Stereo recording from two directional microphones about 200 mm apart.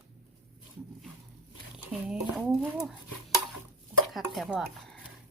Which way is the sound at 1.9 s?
5° right (ahead or behind).